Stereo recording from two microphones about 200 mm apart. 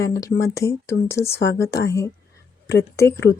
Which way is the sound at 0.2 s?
15° left (ahead or behind).